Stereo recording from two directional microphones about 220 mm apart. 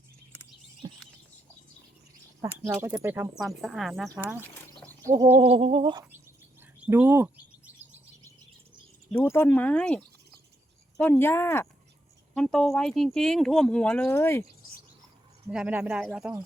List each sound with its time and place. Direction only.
2.4 s speech: 10° right (ahead or behind)
5.1 s a sound: 20° right (ahead or behind)
6.6 s bird: 10° right (ahead or behind)
9.1 s speech: 10° left (ahead or behind)
15.4 s speech: 5° right (ahead or behind)